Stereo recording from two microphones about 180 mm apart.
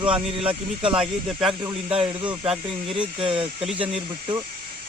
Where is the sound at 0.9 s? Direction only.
5° right (ahead or behind).